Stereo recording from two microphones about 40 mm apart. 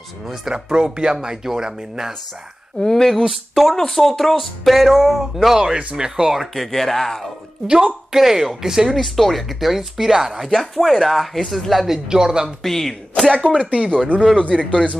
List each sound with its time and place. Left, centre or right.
0.3 s speech: centre
2.8 s speech: centre
3.1 s speech: centre
6.5 s speech: centre
7.6 s speech: centre
8.2 s speech: centre
12.1 s speech: centre
12.6 s speech: centre
13.3 s speech: left